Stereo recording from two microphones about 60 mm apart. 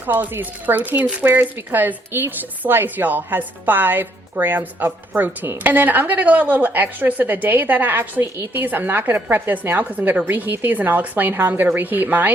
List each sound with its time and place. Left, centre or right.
0.0 s a woman's voice: right